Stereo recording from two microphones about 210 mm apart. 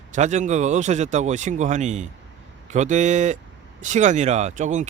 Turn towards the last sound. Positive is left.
turn(degrees=-35)  # may be behind; listen again after turning